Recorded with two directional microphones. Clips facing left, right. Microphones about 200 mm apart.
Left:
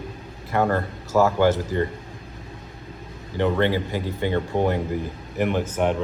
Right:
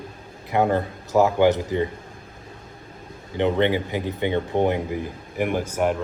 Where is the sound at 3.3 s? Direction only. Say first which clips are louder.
Right 1 dB; 20° right (ahead or behind).